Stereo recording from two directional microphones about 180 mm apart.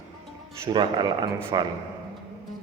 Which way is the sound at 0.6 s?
25° right (ahead or behind).